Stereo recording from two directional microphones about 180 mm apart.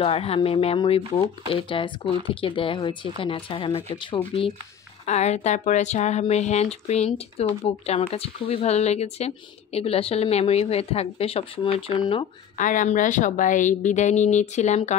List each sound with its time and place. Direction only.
0.0 s speech: 35° left (ahead or behind)
5.0 s speech: 40° left (ahead or behind)
12.5 s speech: 45° left (ahead or behind)